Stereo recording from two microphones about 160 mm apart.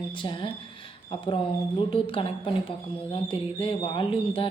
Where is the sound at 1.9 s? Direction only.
35° left (ahead or behind).